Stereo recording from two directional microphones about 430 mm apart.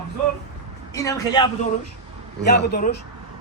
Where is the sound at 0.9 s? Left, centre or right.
Centre.